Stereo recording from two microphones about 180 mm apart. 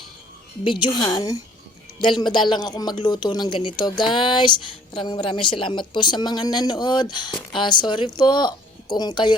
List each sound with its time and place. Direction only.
0.6 s speech: 25° left (ahead or behind)